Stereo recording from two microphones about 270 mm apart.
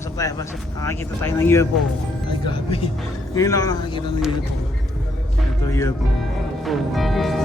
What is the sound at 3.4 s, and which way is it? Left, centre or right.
Speech, centre.